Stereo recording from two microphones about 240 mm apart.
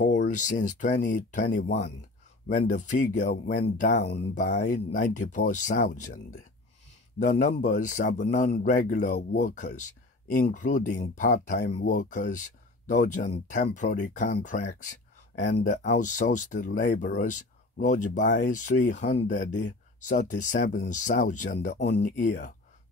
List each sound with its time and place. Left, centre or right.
0.0 s speech: left
7.2 s speech: left